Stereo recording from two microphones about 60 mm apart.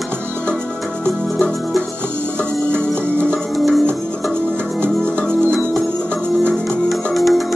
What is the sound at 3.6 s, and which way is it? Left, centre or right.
Music, centre.